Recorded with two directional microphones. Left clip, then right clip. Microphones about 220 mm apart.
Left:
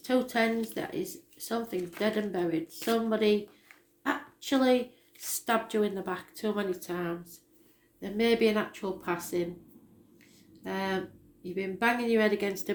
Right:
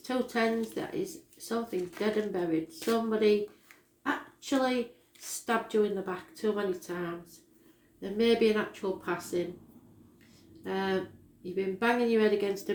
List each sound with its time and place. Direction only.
0.0 s speech: 40° left (ahead or behind)
4.0 s a sound: 40° left (ahead or behind)
5.5 s speech: 40° left (ahead or behind)
10.6 s speech: 35° left (ahead or behind)